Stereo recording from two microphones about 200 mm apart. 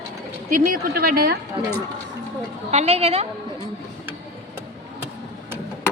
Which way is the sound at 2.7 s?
30° right (ahead or behind).